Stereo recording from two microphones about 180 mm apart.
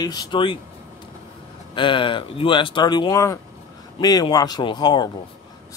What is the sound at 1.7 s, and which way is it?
Speech, 25° left (ahead or behind).